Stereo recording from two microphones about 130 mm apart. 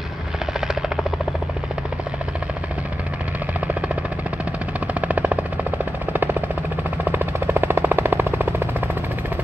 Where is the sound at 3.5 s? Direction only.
10° right (ahead or behind).